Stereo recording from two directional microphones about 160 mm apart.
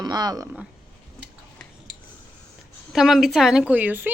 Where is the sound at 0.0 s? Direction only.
25° right (ahead or behind).